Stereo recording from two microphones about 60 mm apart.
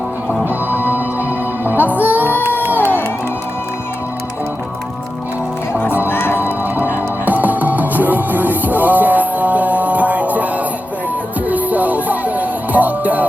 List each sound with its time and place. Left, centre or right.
0.4 s music: right
6.1 s music: left
6.4 s music: right